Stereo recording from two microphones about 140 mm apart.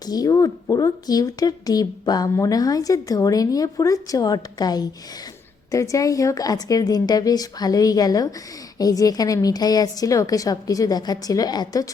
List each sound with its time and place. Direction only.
0.0 s speech: 25° left (ahead or behind)